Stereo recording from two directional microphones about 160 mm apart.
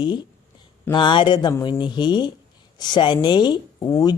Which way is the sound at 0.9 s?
30° left (ahead or behind).